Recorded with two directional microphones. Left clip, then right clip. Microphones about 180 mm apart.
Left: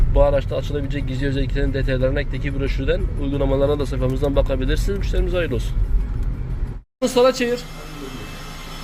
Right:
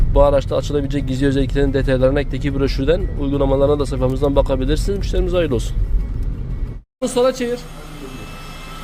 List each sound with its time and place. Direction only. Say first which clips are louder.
0.1 s speech: right 4 dB; 25° right (ahead or behind)
7.0 s speech: left 1 dB; centre (ahead or behind)